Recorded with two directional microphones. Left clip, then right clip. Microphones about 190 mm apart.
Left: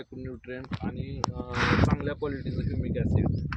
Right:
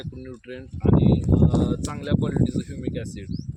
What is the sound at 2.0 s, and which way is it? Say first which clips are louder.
Speech: right 6 dB; 5° left (ahead or behind).